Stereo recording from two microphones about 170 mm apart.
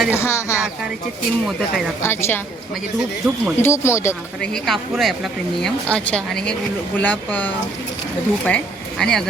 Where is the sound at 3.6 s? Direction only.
15° left (ahead or behind).